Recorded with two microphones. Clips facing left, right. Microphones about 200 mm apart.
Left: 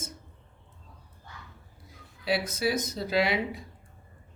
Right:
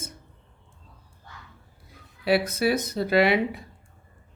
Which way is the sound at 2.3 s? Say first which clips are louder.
Right 6 dB; 60° right (ahead or behind).